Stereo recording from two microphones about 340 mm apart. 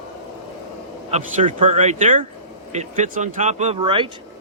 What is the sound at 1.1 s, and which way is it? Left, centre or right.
Speech, right.